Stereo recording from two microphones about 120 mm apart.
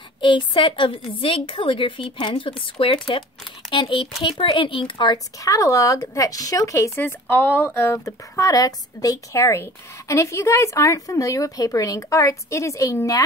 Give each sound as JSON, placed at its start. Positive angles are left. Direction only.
{"t": 0.2, "sound": "a woman's voice", "side_deg": 45}
{"t": 5.4, "sound": "speech", "side_deg": 25}